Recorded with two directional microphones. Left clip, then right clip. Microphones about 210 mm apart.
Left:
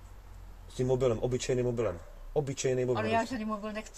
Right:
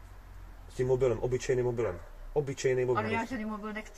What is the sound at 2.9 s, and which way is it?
Speech, 50° left (ahead or behind).